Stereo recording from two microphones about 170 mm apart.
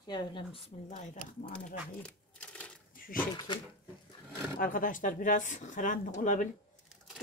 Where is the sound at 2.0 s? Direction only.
5° left (ahead or behind).